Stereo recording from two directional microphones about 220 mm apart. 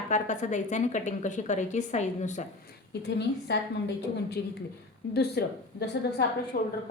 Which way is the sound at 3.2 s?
50° left (ahead or behind).